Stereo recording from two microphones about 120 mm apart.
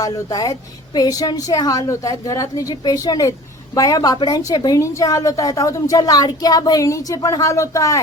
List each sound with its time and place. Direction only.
0.0 s a woman's voice: 30° left (ahead or behind)